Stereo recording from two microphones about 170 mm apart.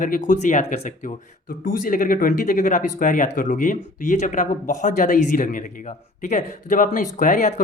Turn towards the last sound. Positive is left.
turn(degrees=50)  # may be behind; listen again after turning